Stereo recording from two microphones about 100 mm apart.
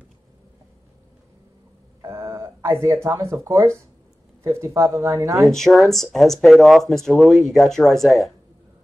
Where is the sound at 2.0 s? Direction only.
25° right (ahead or behind).